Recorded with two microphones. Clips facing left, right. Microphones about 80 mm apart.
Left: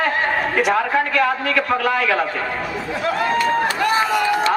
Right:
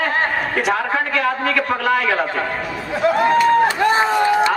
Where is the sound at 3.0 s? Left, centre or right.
Right.